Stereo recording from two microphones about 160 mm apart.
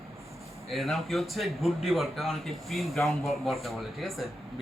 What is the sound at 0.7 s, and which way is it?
A man's voice, centre (ahead or behind).